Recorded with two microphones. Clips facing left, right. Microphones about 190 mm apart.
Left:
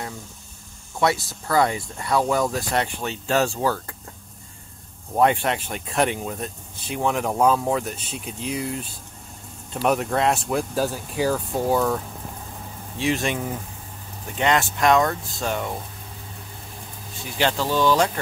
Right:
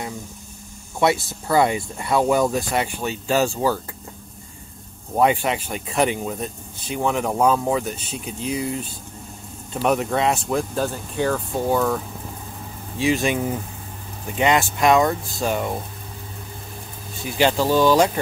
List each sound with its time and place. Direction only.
1.0 s speech: 25° right (ahead or behind)
2.2 s speech: centre (ahead or behind)
5.1 s speech: 5° right (ahead or behind)
17.4 s speech: 10° right (ahead or behind)